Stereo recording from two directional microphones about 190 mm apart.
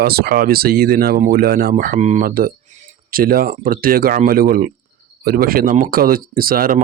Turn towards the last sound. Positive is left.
turn(degrees=-50)  # may be behind; listen again after turning